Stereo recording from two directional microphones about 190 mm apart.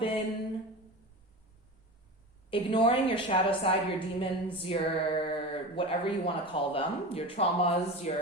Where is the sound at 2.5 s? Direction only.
25° left (ahead or behind).